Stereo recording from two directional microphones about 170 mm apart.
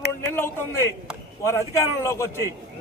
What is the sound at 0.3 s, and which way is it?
A man's voice, 10° left (ahead or behind).